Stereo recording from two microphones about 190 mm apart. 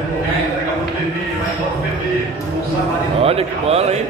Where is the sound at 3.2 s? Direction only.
30° right (ahead or behind).